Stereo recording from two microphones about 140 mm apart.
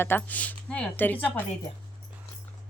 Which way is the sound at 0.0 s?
15° left (ahead or behind).